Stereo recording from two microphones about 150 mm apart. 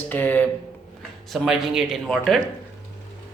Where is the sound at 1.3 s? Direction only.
Centre (ahead or behind).